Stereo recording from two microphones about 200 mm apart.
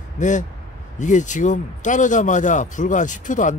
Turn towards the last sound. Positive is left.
turn(degrees=40)  # may be behind; listen again after turning